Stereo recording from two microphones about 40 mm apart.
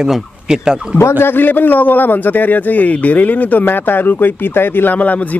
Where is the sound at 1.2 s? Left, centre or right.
Left.